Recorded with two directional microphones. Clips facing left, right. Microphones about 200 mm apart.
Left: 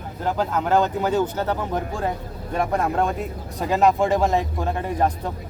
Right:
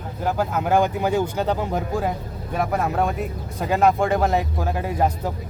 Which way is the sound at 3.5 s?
Centre (ahead or behind).